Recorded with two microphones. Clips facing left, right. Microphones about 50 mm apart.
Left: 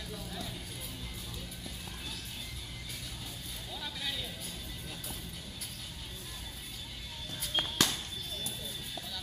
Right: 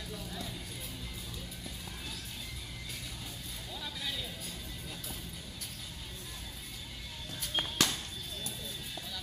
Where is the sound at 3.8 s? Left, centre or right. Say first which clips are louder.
Left 1 dB; centre.